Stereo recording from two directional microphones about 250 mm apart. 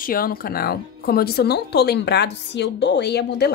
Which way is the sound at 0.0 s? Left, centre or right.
Left.